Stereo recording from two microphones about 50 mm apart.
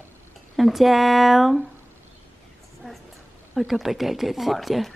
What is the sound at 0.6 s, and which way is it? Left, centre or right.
Speech, centre.